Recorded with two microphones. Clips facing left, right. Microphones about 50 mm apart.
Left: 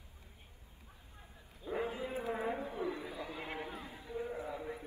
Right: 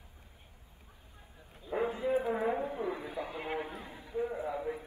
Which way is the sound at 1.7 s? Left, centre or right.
Right.